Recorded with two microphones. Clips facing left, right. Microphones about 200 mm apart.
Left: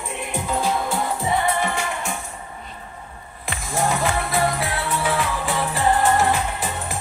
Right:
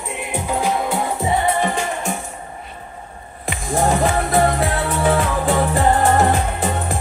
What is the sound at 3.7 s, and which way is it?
Music, 45° right (ahead or behind).